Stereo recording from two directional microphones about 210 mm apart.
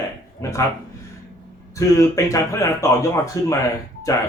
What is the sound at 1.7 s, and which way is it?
Speech, 15° left (ahead or behind).